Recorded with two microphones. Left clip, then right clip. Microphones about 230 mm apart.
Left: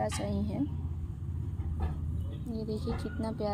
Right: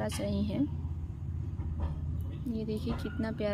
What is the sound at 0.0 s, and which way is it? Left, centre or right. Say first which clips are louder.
Speech: left 1 dB; centre.